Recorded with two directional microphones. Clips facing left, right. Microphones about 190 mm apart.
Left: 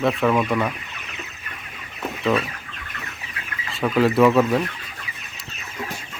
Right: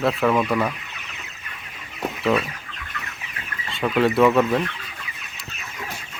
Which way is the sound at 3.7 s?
Centre (ahead or behind).